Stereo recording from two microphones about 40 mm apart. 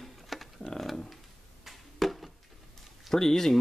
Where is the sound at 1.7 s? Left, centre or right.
Centre.